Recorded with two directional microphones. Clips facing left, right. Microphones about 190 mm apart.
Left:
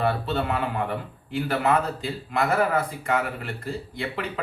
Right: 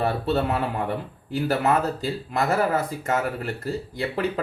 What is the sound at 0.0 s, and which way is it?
Speech, 40° right (ahead or behind).